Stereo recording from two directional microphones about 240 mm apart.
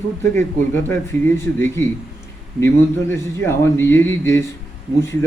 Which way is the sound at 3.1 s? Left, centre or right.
Centre.